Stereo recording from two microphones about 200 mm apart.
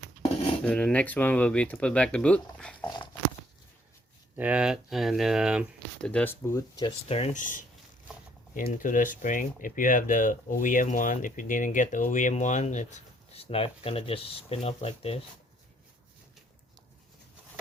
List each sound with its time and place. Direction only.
0.6 s speech: 5° left (ahead or behind)
4.4 s speech: 5° right (ahead or behind)
6.1 s speech: 10° left (ahead or behind)
7.1 s speech: 30° left (ahead or behind)